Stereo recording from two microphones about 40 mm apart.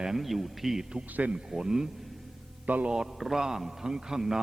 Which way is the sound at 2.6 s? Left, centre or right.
Right.